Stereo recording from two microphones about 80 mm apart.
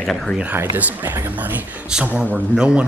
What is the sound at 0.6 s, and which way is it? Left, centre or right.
A man's voice, right.